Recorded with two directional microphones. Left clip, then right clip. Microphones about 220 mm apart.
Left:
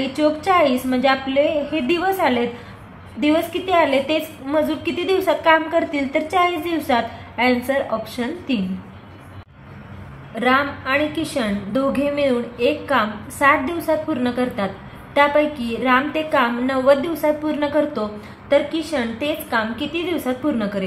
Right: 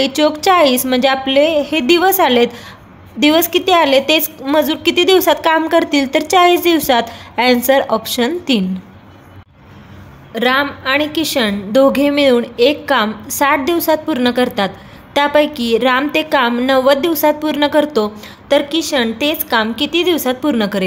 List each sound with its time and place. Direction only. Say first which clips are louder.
0.0 s a woman's voice: right 6 dB; 50° right (ahead or behind)
10.3 s a woman's voice: right 4 dB; 45° right (ahead or behind)